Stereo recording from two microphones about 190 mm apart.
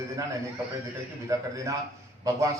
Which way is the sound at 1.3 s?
15° right (ahead or behind).